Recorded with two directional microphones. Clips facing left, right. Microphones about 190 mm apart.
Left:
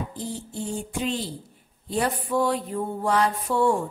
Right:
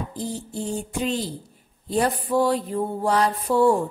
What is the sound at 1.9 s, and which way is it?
A woman's voice, 35° right (ahead or behind).